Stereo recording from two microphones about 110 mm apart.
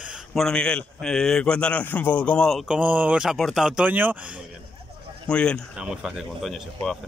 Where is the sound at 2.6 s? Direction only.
10° right (ahead or behind).